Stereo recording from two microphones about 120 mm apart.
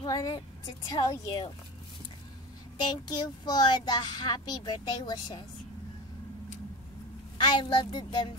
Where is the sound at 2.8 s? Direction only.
35° left (ahead or behind).